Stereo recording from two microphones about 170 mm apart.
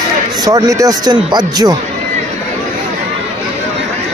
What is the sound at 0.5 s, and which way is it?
Speech, 20° right (ahead or behind).